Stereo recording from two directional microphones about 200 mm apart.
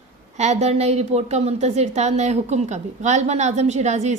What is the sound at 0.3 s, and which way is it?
A woman's voice, 35° right (ahead or behind).